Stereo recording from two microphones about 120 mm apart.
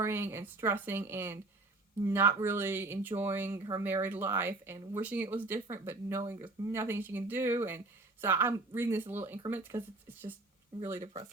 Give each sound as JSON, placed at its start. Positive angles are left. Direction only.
{"t": 0.0, "sound": "speech", "side_deg": -20}